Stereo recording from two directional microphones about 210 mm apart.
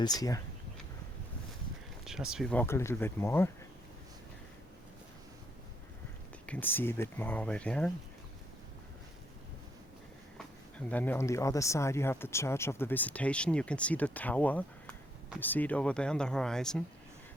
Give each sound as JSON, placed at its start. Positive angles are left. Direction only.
{"t": 0.0, "sound": "speech", "side_deg": 15}
{"t": 2.0, "sound": "speech", "side_deg": 0}
{"t": 6.4, "sound": "speech", "side_deg": 10}
{"t": 10.3, "sound": "speech", "side_deg": 5}